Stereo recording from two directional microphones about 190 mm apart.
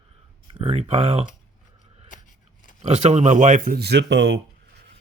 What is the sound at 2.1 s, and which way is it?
Scissors, 40° left (ahead or behind).